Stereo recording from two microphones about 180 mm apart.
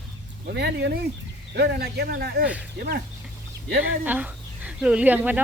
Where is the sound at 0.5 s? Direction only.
65° right (ahead or behind).